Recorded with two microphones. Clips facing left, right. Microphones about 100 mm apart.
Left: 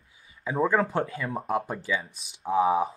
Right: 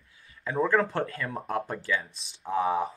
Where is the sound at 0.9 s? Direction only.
5° left (ahead or behind).